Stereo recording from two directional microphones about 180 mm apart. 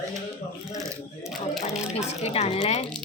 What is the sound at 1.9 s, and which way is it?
Speech, 35° left (ahead or behind).